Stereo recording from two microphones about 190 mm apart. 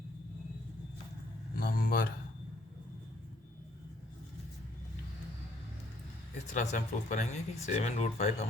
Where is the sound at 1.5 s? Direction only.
50° left (ahead or behind).